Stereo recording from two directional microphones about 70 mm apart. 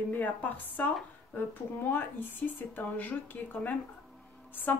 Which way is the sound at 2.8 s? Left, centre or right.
Left.